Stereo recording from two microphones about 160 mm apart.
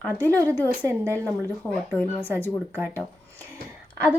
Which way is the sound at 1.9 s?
10° left (ahead or behind).